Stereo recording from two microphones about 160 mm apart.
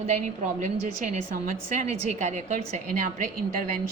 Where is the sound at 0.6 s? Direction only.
50° right (ahead or behind).